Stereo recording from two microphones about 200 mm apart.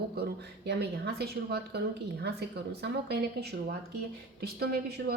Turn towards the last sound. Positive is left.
turn(degrees=-55)  # may be behind; listen again after turning